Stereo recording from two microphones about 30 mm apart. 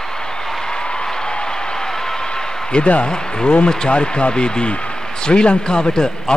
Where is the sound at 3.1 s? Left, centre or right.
Left.